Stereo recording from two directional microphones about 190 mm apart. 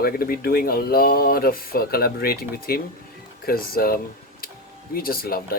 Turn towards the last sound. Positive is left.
turn(degrees=50)  # may be behind; listen again after turning